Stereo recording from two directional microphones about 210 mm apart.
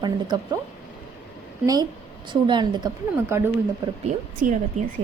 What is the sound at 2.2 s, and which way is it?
A woman's voice, 20° right (ahead or behind).